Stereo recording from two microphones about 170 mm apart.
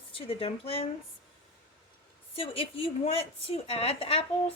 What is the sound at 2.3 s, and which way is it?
A woman's voice, 35° left (ahead or behind).